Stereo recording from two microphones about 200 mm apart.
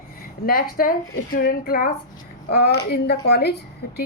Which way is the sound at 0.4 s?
45° left (ahead or behind).